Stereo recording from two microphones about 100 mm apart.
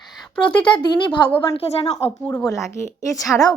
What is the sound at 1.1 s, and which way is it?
Speech, 15° left (ahead or behind).